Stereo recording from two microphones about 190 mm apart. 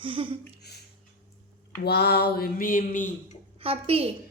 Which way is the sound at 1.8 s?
60° left (ahead or behind).